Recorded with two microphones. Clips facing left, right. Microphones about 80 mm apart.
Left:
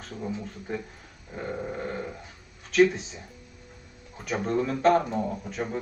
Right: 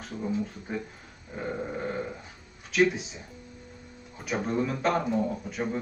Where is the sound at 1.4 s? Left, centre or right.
Centre.